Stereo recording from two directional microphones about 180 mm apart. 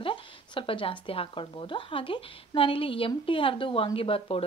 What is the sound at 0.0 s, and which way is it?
Speech, 30° left (ahead or behind).